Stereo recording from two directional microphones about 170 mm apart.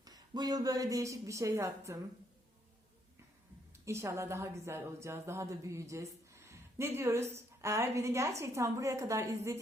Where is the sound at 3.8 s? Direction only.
15° right (ahead or behind).